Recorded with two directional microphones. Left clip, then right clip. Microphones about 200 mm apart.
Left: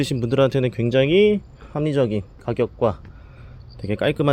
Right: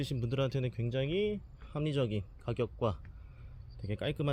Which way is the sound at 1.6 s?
20° right (ahead or behind).